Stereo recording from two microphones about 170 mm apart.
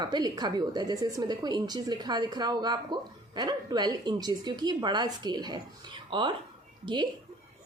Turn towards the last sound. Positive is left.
turn(degrees=-25)  # may be behind; listen again after turning